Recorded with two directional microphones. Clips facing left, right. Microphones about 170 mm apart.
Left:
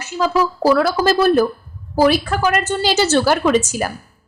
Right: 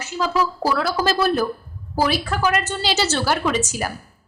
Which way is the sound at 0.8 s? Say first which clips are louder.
Left 5 dB; 50° left (ahead or behind).